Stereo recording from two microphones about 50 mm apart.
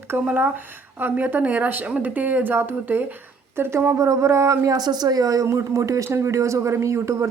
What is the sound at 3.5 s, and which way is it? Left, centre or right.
A man's voice, right.